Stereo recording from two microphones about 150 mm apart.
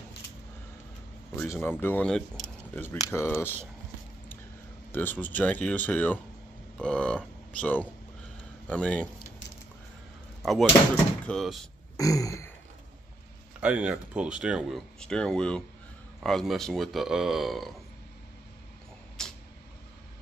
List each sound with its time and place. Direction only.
1.4 s speech: 15° left (ahead or behind)
4.9 s speech: 10° left (ahead or behind)
10.4 s speech: centre (ahead or behind)
12.0 s a sound: 20° left (ahead or behind)
13.6 s speech: 10° right (ahead or behind)
19.2 s vehicle: 5° left (ahead or behind)